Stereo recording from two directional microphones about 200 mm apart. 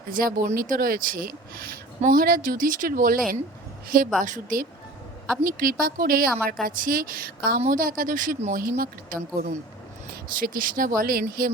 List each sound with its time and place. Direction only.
0.1 s a woman's voice: 45° right (ahead or behind)